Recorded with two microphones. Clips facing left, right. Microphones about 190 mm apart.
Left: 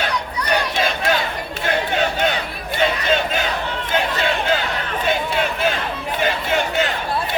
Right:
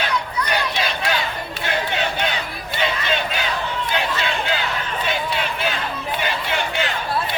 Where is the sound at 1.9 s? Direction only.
45° left (ahead or behind).